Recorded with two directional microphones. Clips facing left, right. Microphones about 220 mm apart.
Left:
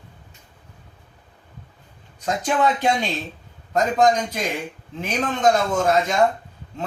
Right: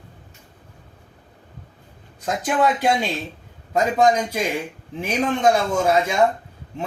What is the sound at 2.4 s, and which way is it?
A man's voice, 5° right (ahead or behind).